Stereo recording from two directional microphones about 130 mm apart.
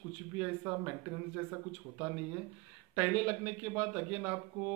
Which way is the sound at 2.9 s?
15° right (ahead or behind).